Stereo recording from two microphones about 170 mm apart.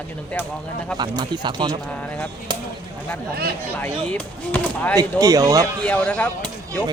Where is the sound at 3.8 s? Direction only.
10° left (ahead or behind).